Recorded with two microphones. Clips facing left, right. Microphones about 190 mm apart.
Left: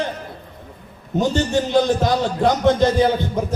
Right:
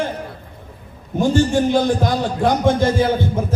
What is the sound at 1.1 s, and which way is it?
Speech, 20° left (ahead or behind).